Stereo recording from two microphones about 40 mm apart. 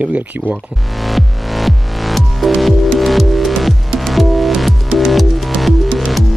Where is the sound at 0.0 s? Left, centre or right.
Right.